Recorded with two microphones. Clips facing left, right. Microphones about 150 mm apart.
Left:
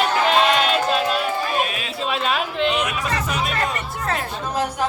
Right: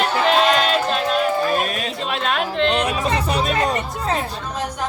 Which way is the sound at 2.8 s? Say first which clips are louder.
Right 4 dB; 30° right (ahead or behind).